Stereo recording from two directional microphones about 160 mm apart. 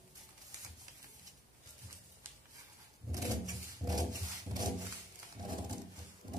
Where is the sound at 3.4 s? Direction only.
25° right (ahead or behind).